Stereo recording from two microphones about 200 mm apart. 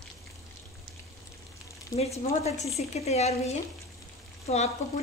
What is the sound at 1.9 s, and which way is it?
Speech, 30° left (ahead or behind).